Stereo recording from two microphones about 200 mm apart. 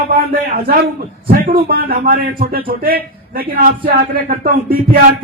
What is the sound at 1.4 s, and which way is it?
A man's voice, 50° right (ahead or behind).